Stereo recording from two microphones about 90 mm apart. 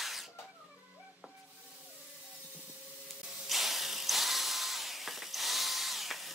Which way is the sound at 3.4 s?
Centre (ahead or behind).